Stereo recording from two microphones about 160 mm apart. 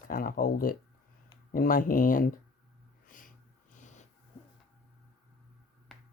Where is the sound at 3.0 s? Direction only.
55° left (ahead or behind).